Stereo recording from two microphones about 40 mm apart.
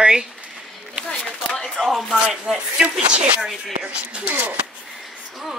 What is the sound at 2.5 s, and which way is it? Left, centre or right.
Speech, right.